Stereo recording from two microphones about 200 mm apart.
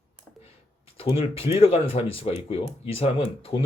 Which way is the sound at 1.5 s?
30° left (ahead or behind).